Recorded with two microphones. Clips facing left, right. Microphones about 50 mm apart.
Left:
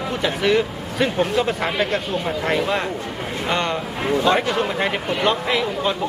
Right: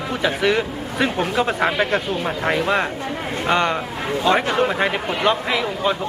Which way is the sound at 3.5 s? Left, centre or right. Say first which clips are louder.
Right 4 dB; centre.